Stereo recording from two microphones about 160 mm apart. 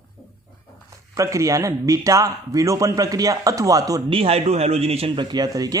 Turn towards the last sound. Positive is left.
turn(degrees=-20)  # may be behind; listen again after turning